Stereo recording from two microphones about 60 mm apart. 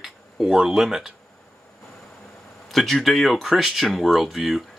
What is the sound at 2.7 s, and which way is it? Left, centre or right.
Speech, centre.